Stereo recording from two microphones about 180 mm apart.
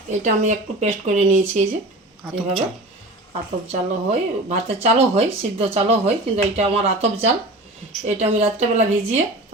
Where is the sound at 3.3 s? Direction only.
35° right (ahead or behind).